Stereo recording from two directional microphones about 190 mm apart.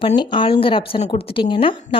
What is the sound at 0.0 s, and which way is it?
A woman's voice, 25° left (ahead or behind).